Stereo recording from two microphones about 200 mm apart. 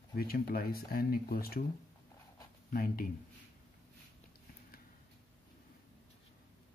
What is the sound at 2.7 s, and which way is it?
Speech, 45° left (ahead or behind).